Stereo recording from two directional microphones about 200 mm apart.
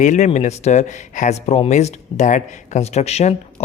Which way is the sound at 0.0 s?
35° left (ahead or behind).